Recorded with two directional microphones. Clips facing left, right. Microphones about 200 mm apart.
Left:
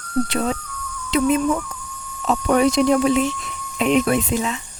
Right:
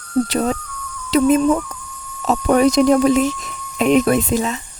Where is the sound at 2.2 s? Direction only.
40° right (ahead or behind).